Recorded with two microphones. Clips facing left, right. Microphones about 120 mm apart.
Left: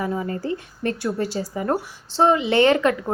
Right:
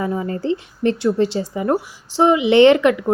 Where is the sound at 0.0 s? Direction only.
20° right (ahead or behind).